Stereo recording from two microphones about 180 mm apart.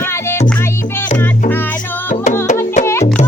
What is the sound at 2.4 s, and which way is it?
Music, 40° left (ahead or behind).